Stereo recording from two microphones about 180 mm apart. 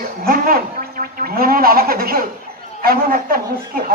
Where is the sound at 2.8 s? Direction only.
55° right (ahead or behind).